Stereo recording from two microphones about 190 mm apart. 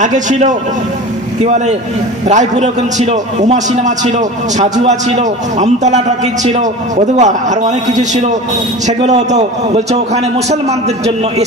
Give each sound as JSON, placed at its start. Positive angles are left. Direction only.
{"t": 0.0, "sound": "a man's voice", "side_deg": -40}